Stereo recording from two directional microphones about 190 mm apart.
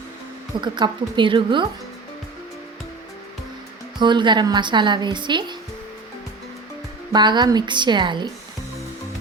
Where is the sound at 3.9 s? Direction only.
25° right (ahead or behind).